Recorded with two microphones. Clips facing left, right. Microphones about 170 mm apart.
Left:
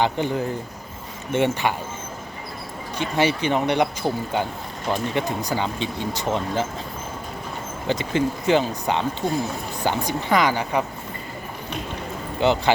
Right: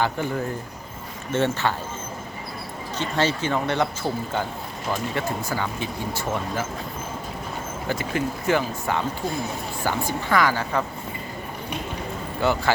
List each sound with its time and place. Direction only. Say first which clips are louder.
0.0 s speech: left 2 dB; 20° left (ahead or behind)
3.0 s speech: left 2 dB; 15° left (ahead or behind)
7.9 s speech: left 4 dB; 20° left (ahead or behind)
12.4 s speech: left 3 dB; 20° left (ahead or behind)